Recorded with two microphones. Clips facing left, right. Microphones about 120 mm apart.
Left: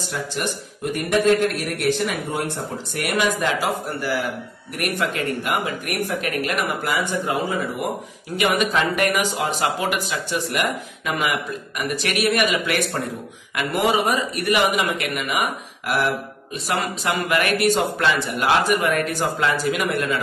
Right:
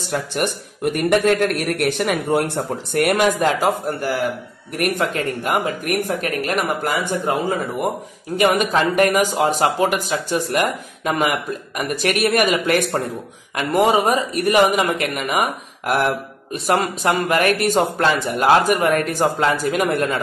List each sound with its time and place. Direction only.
0.1 s a man's voice: 55° right (ahead or behind)
8.4 s speech: 40° right (ahead or behind)
16.5 s speech: 50° right (ahead or behind)